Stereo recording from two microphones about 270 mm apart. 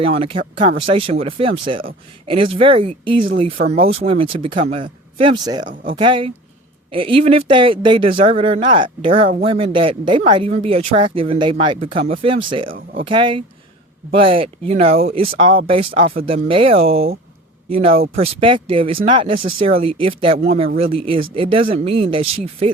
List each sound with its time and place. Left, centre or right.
0.0 s speech: centre
12.7 s speech: right
13.1 s speech: centre